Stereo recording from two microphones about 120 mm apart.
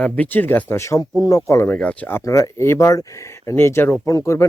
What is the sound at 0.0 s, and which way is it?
Speech, 15° left (ahead or behind).